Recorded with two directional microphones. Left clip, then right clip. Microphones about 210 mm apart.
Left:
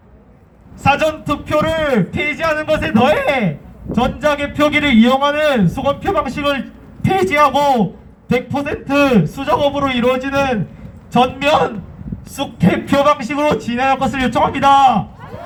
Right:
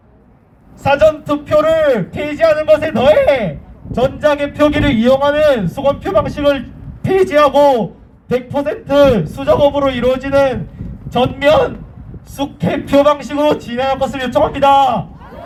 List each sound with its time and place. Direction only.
0.8 s a man's voice: 35° right (ahead or behind)